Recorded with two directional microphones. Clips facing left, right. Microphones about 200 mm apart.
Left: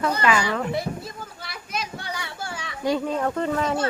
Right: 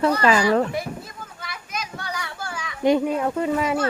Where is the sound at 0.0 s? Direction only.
35° right (ahead or behind).